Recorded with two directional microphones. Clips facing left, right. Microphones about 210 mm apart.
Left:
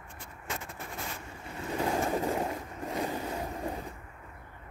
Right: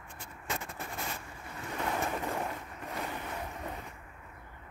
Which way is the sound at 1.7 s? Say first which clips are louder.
Left 5 dB; 30° left (ahead or behind).